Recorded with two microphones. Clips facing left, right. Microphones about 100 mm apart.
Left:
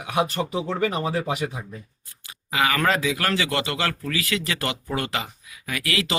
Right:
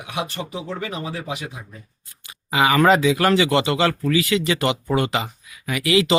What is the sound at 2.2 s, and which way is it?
Speech, 20° right (ahead or behind).